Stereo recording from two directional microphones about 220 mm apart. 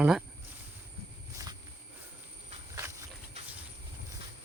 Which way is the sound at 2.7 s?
10° right (ahead or behind).